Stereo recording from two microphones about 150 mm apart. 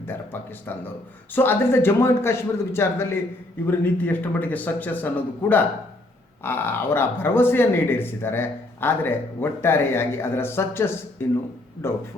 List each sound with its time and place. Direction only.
0.3 s speech: 15° left (ahead or behind)